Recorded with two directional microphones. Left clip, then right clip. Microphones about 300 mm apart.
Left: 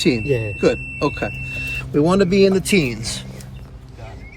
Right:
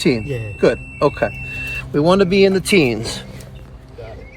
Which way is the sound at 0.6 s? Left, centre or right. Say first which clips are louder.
Right 6 dB; right.